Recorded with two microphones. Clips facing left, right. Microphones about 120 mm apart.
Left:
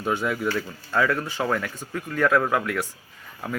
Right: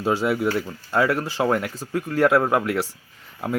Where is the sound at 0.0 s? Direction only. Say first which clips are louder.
Right 4 dB; 30° right (ahead or behind).